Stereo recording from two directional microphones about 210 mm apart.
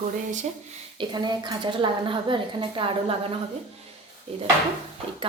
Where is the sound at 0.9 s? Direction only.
20° right (ahead or behind).